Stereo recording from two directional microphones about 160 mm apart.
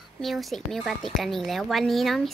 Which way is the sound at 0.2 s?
Centre (ahead or behind).